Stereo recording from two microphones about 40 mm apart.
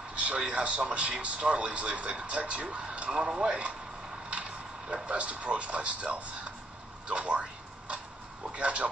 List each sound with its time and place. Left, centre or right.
0.2 s a man's voice: right
4.8 s a man's voice: right
8.5 s a man's voice: right